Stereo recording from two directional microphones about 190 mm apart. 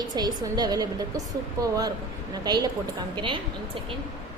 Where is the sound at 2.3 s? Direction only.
20° right (ahead or behind).